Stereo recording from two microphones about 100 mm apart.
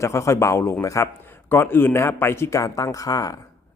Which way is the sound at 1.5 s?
20° left (ahead or behind).